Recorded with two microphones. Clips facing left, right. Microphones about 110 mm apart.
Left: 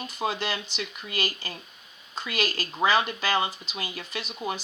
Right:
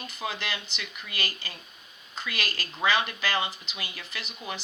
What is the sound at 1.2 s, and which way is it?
Speech, 15° left (ahead or behind).